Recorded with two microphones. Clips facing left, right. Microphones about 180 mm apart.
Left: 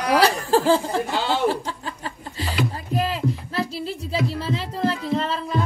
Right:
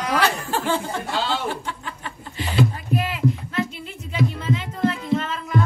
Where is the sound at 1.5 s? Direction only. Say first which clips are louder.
Left 4 dB; 35° left (ahead or behind).